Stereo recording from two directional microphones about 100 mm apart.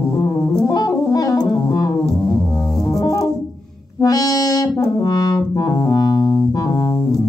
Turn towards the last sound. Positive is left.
turn(degrees=35)  # may be behind; listen again after turning